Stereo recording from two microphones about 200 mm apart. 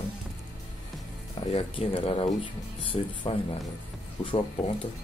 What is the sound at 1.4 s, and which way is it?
Speech, 30° left (ahead or behind).